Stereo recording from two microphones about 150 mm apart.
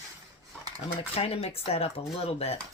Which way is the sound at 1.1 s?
40° left (ahead or behind).